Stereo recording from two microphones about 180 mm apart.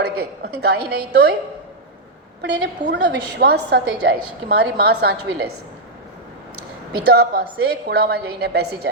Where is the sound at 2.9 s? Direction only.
70° right (ahead or behind).